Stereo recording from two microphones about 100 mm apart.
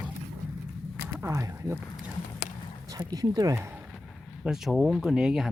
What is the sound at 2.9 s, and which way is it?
Speech, 40° right (ahead or behind).